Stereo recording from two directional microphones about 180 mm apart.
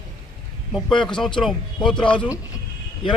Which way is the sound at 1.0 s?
5° left (ahead or behind).